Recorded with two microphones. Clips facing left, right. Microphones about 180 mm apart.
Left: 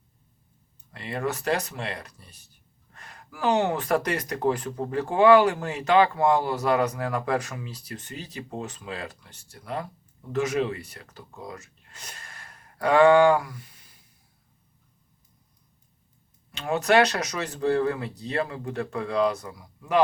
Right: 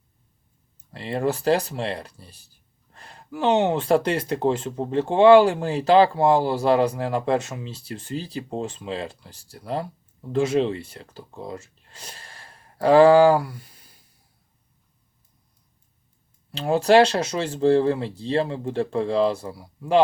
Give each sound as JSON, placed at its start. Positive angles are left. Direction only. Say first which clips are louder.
{"t": 0.9, "sound": "speech", "louder": "right 5 dB", "side_deg": -30}
{"t": 16.5, "sound": "speech", "louder": "right 5 dB", "side_deg": -30}